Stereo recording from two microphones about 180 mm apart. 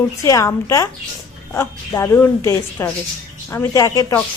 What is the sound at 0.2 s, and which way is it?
A woman's voice, 15° left (ahead or behind).